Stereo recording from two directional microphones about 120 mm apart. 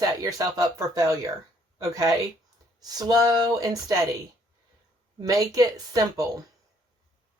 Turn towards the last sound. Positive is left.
turn(degrees=-30)  # may be behind; listen again after turning